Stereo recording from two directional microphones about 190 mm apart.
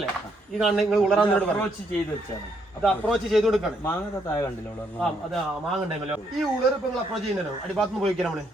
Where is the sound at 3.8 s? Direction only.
15° left (ahead or behind).